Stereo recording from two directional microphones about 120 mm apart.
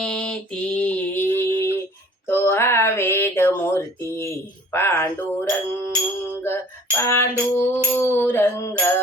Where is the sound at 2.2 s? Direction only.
20° left (ahead or behind).